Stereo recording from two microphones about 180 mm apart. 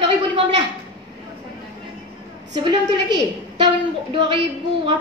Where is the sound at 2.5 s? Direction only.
25° right (ahead or behind).